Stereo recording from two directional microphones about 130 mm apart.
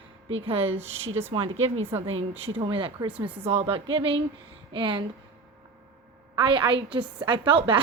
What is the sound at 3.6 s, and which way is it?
A woman's voice, 40° right (ahead or behind).